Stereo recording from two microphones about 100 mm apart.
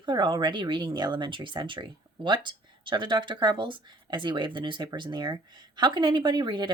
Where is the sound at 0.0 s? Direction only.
50° right (ahead or behind).